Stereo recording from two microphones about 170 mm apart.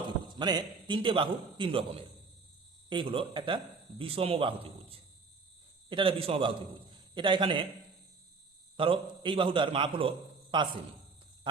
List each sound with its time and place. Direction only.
0.3 s a man's voice: 25° right (ahead or behind)
8.7 s a man's voice: 30° right (ahead or behind)